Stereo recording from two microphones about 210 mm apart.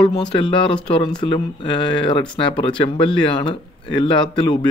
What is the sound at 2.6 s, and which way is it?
Speech, 25° left (ahead or behind).